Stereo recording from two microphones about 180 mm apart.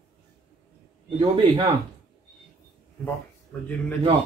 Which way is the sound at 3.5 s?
10° left (ahead or behind).